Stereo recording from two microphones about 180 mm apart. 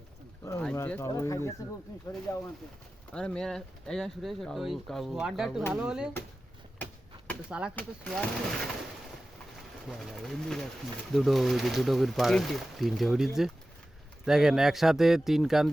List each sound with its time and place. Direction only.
0.6 s speech: 5° left (ahead or behind)
3.2 s speech: 5° left (ahead or behind)
7.8 s speech: 5° left (ahead or behind)
9.9 s speech: centre (ahead or behind)